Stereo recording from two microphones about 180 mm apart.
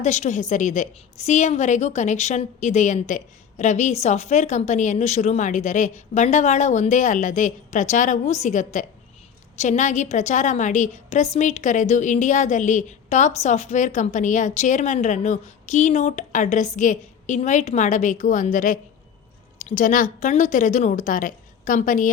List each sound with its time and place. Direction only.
0.0 s a woman's voice: 40° left (ahead or behind)